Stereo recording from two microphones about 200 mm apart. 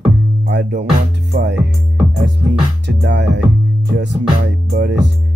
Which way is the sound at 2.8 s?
60° right (ahead or behind).